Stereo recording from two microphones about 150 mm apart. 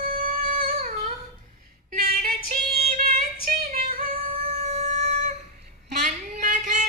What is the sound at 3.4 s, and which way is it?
Female singing, 65° right (ahead or behind).